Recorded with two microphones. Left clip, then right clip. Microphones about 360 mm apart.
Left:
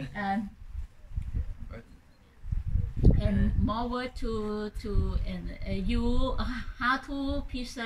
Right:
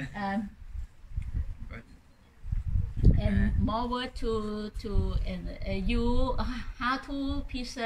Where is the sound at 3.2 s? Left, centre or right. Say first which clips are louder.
Even; centre.